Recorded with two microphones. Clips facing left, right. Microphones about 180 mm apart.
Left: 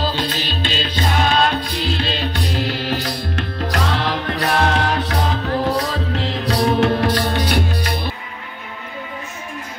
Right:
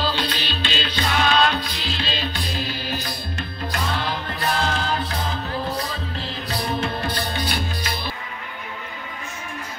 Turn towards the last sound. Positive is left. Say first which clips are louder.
# left 7 dB
turn(degrees=65)  # may be behind; listen again after turning